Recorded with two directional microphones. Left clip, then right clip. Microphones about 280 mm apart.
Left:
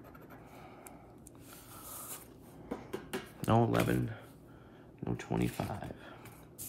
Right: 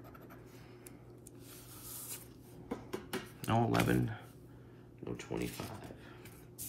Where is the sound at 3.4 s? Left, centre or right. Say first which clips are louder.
Left 4 dB; centre.